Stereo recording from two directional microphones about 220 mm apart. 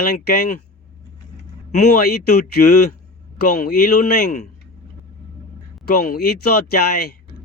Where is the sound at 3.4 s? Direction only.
40° left (ahead or behind).